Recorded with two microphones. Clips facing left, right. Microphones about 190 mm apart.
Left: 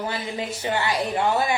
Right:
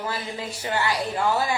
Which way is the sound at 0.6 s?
25° left (ahead or behind).